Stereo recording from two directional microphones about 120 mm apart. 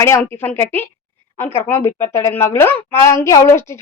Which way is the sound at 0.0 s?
20° left (ahead or behind).